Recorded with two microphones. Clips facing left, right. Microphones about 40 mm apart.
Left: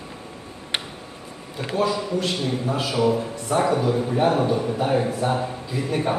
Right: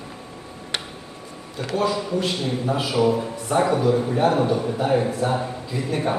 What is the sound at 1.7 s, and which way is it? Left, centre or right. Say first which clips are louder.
A woman's voice: even; centre.